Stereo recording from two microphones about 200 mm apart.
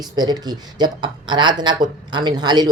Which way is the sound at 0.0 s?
20° right (ahead or behind).